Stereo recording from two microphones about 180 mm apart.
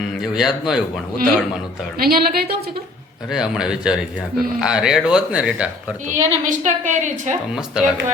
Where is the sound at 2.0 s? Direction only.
55° right (ahead or behind).